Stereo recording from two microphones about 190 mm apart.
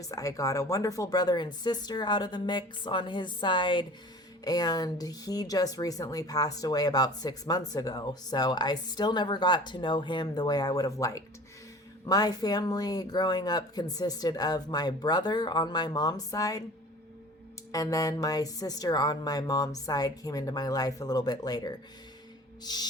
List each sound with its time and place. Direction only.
0.1 s speech: 20° left (ahead or behind)
17.7 s speech: 20° left (ahead or behind)